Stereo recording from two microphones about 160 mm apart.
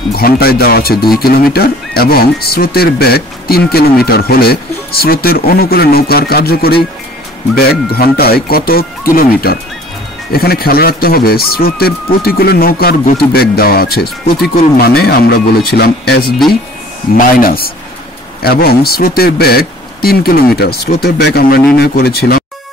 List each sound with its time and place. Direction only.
0.1 s speech: 75° left (ahead or behind)
17.2 s speech: 65° left (ahead or behind)